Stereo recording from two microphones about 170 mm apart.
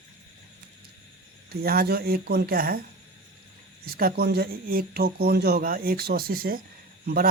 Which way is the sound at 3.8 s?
60° right (ahead or behind).